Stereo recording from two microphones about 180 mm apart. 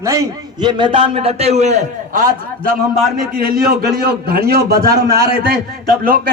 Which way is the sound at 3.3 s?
55° right (ahead or behind).